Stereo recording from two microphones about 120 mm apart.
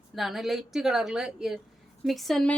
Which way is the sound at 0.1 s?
Centre (ahead or behind).